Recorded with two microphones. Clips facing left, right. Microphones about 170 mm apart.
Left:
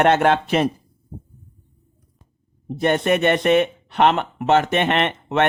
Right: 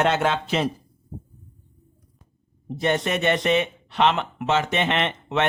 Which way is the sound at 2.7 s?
55° left (ahead or behind).